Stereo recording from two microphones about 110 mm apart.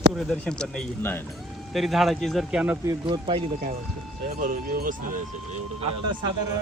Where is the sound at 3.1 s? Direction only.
45° right (ahead or behind).